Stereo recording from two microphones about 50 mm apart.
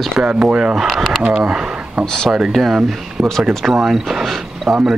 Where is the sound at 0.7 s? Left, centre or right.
Centre.